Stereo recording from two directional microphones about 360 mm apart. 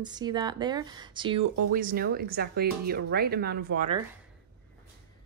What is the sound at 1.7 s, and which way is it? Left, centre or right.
Speech, right.